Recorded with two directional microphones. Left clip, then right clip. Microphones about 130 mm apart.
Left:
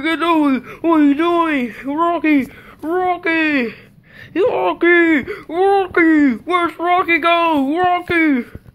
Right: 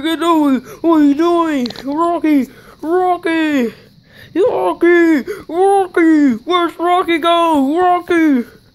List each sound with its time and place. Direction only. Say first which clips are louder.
0.0 s speech: right 2 dB; 40° right (ahead or behind)
4.3 s speech: right 2 dB; 35° right (ahead or behind); by 8.5 s 60° right (ahead or behind)